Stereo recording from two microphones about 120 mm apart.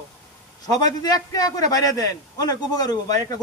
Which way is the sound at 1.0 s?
30° left (ahead or behind).